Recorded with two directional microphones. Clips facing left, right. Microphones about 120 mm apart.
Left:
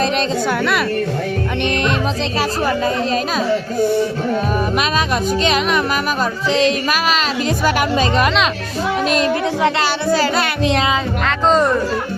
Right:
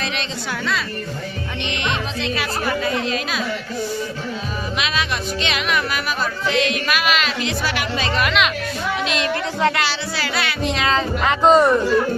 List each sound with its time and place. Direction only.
2.6 s speech: 40° left (ahead or behind)
9.8 s music: 45° left (ahead or behind)
11.3 s speech: 10° right (ahead or behind)